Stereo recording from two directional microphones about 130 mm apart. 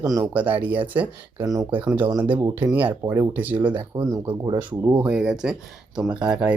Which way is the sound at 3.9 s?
40° right (ahead or behind).